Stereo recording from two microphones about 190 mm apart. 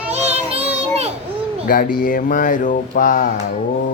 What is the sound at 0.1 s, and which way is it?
Child singing, 35° right (ahead or behind).